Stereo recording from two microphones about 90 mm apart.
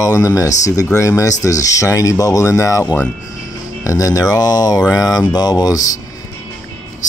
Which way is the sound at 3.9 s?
40° left (ahead or behind).